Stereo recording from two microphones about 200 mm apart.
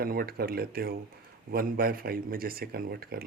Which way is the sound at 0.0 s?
45° right (ahead or behind).